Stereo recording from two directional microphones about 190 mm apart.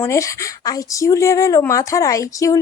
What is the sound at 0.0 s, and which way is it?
Speech, 15° left (ahead or behind).